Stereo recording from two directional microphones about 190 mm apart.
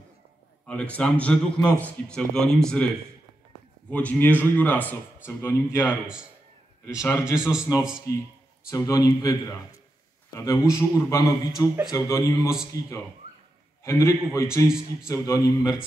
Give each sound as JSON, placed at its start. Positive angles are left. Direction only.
{"t": 0.7, "sound": "a man's voice", "side_deg": 5}
{"t": 3.9, "sound": "a man's voice", "side_deg": 10}
{"t": 5.9, "sound": "speech", "side_deg": -5}
{"t": 7.0, "sound": "a man's voice", "side_deg": 15}
{"t": 7.3, "sound": "speech", "side_deg": -5}
{"t": 8.1, "sound": "a man's voice", "side_deg": 15}